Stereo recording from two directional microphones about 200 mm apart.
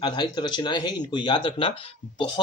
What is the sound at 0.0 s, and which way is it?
Speech, 20° left (ahead or behind).